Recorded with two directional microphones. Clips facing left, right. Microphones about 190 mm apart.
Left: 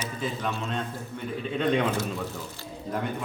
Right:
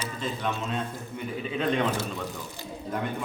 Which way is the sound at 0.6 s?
5° right (ahead or behind).